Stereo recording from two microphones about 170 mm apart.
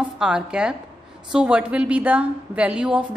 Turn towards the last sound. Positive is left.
turn(degrees=-5)  # may be behind; listen again after turning